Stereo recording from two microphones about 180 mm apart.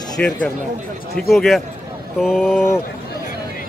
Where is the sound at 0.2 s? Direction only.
5° left (ahead or behind).